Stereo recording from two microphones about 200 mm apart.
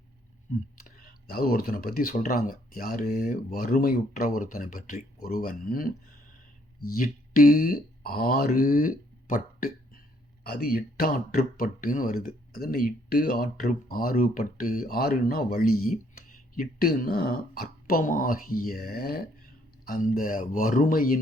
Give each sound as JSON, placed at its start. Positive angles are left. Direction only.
{"t": 0.9, "sound": "speech", "side_deg": 45}